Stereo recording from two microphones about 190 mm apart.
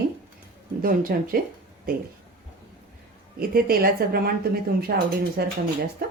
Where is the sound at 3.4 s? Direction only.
50° right (ahead or behind).